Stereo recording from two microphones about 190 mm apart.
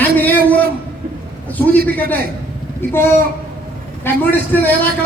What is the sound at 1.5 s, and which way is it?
Speech, 10° left (ahead or behind).